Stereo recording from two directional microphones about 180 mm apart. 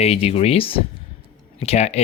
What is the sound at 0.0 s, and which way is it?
A man's voice, 35° left (ahead or behind).